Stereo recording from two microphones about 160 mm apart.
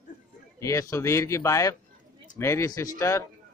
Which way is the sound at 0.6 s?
20° left (ahead or behind).